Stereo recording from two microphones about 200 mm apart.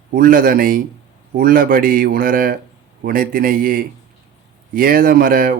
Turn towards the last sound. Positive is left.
turn(degrees=-45)  # may be behind; listen again after turning